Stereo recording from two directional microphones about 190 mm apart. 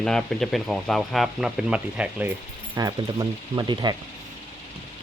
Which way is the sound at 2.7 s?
20° right (ahead or behind).